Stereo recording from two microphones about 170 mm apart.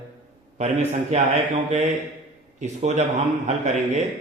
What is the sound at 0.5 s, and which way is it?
A man's voice, 40° right (ahead or behind).